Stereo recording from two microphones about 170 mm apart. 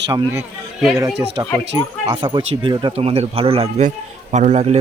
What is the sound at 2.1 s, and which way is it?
A man's voice, 25° right (ahead or behind).